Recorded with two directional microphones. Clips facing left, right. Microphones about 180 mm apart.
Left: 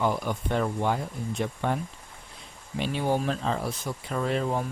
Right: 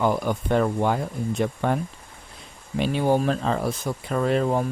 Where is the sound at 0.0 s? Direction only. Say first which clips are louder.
Right 4 dB; 50° right (ahead or behind).